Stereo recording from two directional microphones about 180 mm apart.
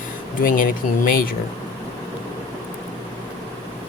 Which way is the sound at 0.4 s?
50° left (ahead or behind).